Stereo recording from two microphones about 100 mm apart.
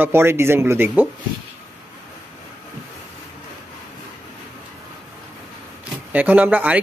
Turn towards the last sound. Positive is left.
turn(degrees=-15)  # may be behind; listen again after turning